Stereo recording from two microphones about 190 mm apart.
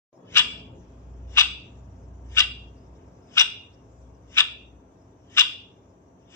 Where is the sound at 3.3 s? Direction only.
15° left (ahead or behind).